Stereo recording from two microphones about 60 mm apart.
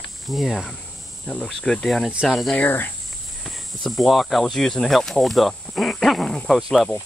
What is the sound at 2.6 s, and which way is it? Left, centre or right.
Speech, left.